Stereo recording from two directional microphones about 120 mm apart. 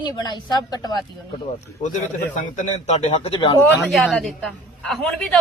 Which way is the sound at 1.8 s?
90° left.